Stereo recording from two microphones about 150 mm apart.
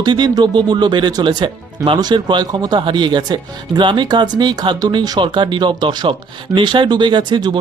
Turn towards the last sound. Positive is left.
turn(degrees=-30)  # may be behind; listen again after turning